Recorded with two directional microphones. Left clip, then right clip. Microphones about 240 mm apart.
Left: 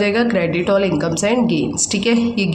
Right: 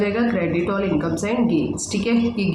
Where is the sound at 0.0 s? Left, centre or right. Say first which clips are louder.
Left 5 dB; left.